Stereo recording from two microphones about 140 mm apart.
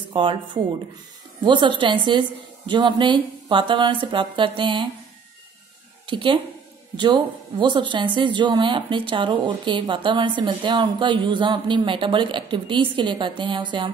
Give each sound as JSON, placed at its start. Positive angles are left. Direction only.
{"t": 0.1, "sound": "speech", "side_deg": -35}
{"t": 1.4, "sound": "speech", "side_deg": -35}
{"t": 6.0, "sound": "a woman's voice", "side_deg": -35}